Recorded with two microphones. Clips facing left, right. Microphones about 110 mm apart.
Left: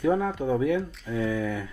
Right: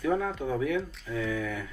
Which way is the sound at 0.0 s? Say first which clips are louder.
Left 4 dB; 25° left (ahead or behind).